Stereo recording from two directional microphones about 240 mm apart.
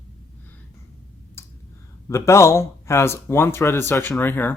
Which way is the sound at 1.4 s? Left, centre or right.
Centre.